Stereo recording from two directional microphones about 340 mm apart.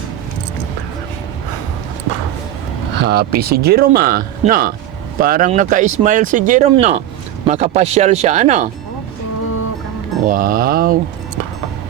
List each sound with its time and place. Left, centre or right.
3.0 s speech: right
10.2 s speech: right